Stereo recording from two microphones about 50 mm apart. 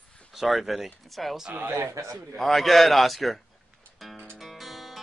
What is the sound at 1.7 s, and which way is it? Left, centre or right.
Speech, right.